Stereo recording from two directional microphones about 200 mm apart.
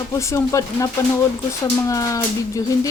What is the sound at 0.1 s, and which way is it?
Speech, 15° left (ahead or behind).